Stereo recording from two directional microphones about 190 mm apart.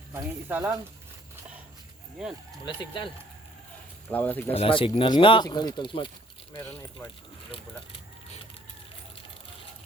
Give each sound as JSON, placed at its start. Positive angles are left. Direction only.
{"t": 0.1, "sound": "speech", "side_deg": -10}
{"t": 2.6, "sound": "speech", "side_deg": 25}
{"t": 4.1, "sound": "speech", "side_deg": 10}
{"t": 4.5, "sound": "speech", "side_deg": 30}
{"t": 7.0, "sound": "speech", "side_deg": 15}